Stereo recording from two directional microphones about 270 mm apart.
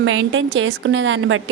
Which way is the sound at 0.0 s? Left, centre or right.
Right.